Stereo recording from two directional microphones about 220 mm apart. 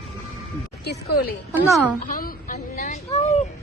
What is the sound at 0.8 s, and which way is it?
Speech, 45° left (ahead or behind).